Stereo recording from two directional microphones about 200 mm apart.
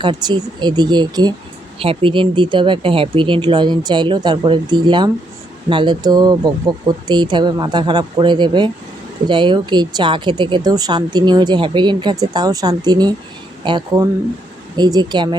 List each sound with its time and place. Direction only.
0.0 s speech: 20° right (ahead or behind)